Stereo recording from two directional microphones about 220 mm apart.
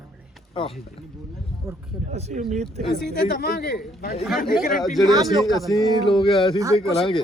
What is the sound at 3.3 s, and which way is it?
Speech, 45° left (ahead or behind).